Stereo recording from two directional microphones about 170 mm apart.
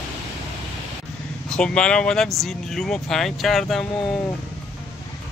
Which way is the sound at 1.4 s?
5° left (ahead or behind).